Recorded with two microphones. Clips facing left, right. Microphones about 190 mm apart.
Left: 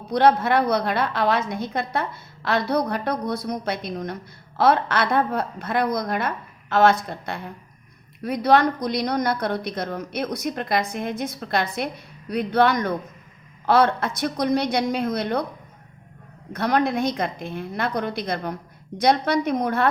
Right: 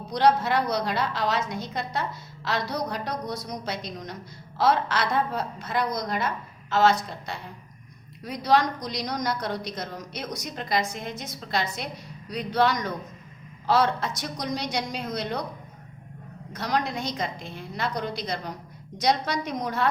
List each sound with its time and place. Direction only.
0.1 s a woman's voice: 55° left (ahead or behind)
16.5 s a woman's voice: 55° left (ahead or behind)